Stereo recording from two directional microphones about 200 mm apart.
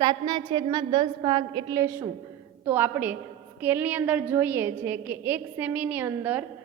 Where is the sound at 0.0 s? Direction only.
20° right (ahead or behind).